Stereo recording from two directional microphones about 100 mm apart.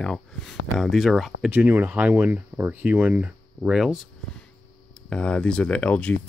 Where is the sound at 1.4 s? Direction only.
20° right (ahead or behind).